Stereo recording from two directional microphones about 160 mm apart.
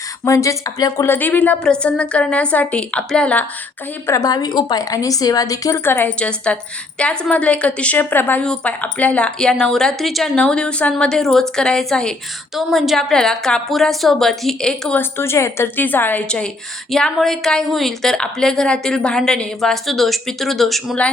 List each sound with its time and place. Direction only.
0.3 s a woman's voice: 20° left (ahead or behind)
4.0 s a woman's voice: 20° left (ahead or behind); by 21.1 s 5° left (ahead or behind)